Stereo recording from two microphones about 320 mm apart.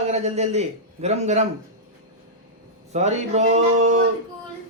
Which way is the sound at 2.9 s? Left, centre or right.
Right.